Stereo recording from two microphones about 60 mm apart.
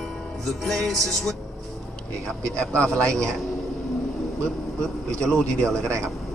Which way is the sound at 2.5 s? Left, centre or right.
Centre.